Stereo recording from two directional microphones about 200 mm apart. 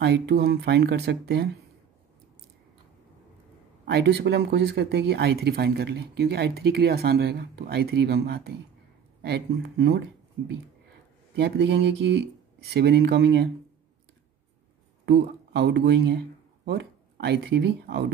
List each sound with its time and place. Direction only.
0.0 s speech: 60° right (ahead or behind)
3.8 s speech: 60° right (ahead or behind)
11.3 s speech: 55° right (ahead or behind)
15.0 s speech: 60° right (ahead or behind)